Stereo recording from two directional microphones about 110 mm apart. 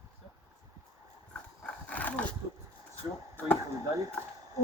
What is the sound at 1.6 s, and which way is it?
Dog, 15° left (ahead or behind).